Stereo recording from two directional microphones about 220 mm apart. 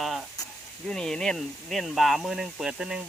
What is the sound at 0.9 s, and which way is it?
Speech, 5° left (ahead or behind).